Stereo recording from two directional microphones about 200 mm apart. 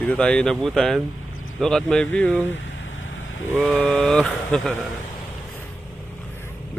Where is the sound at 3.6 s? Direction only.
5° left (ahead or behind).